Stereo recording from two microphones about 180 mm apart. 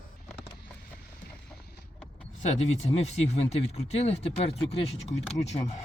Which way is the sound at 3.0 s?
35° left (ahead or behind).